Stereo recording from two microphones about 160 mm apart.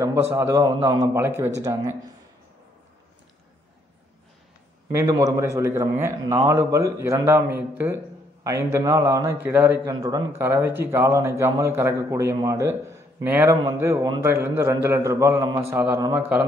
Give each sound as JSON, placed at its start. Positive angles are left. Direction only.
{"t": 0.0, "sound": "a man's voice", "side_deg": -15}
{"t": 4.9, "sound": "a man's voice", "side_deg": -20}